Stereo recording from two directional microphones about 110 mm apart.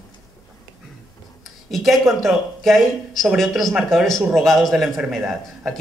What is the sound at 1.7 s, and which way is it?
Speech, centre (ahead or behind).